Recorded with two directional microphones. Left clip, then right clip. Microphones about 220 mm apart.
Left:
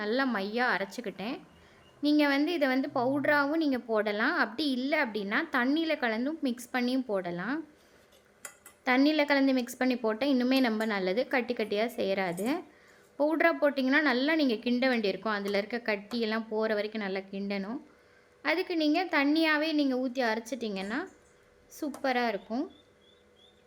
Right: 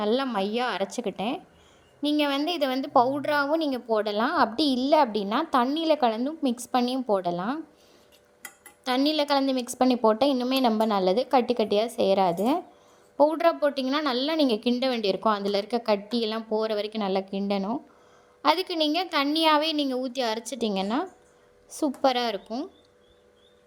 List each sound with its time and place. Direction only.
0.0 s a woman's voice: 15° right (ahead or behind)
6.7 s a woman's voice: 10° left (ahead or behind)
7.1 s a woman's voice: 15° right (ahead or behind)
8.8 s a woman's voice: 20° right (ahead or behind)
18.4 s a woman's voice: 25° right (ahead or behind)